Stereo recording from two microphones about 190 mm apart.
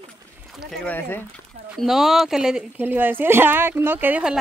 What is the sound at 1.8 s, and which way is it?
Speech, centre (ahead or behind).